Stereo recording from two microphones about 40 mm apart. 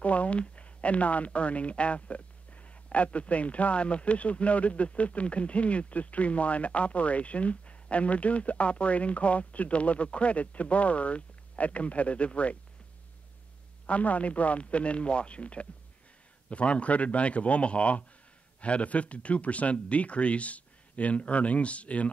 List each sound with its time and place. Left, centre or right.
0.0 s a woman's voice: left
13.8 s a woman's voice: left